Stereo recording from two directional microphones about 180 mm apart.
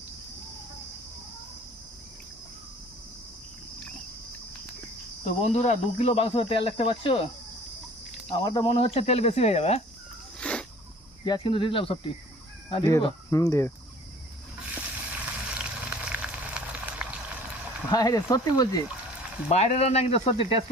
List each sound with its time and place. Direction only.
5.2 s speech: 35° left (ahead or behind)
8.4 s speech: 25° left (ahead or behind)
10.4 s a sound: 5° left (ahead or behind)
11.3 s speech: 25° left (ahead or behind)
14.8 s frying: 5° right (ahead or behind)
17.9 s speech: 20° left (ahead or behind)
19.5 s speech: 35° left (ahead or behind)